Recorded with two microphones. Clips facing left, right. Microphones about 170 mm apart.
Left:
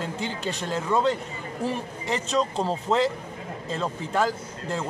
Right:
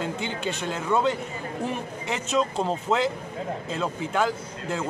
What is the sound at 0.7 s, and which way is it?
A man's voice, 5° right (ahead or behind).